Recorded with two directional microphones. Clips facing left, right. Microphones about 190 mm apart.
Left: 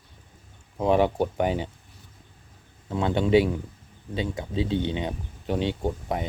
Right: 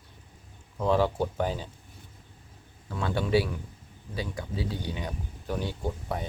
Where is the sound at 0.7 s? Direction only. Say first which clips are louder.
Left 4 dB; 20° left (ahead or behind).